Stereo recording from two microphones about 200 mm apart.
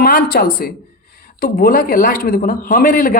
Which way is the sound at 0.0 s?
45° left (ahead or behind).